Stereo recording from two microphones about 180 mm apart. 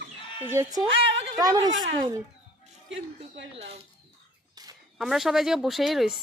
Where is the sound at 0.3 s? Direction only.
15° right (ahead or behind).